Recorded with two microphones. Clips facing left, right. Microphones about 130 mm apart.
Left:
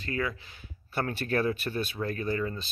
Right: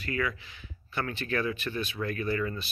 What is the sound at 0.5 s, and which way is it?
Speech, 40° left (ahead or behind).